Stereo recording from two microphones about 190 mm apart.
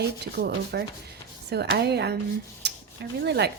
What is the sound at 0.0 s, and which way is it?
Speech, 60° right (ahead or behind).